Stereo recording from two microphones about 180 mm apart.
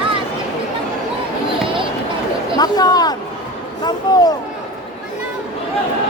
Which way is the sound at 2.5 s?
20° left (ahead or behind).